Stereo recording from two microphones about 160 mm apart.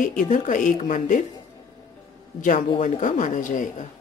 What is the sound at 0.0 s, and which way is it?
A woman's voice, 55° left (ahead or behind).